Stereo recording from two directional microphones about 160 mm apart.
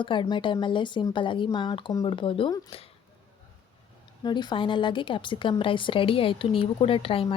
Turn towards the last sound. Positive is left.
turn(degrees=35)  # may be behind; listen again after turning